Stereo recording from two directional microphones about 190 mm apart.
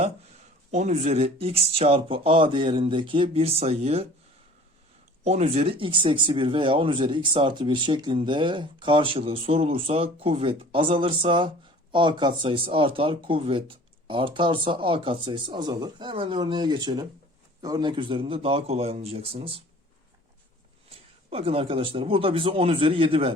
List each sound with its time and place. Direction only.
0.7 s speech: 40° right (ahead or behind)
5.2 s speech: 35° right (ahead or behind)
21.2 s speech: 30° right (ahead or behind)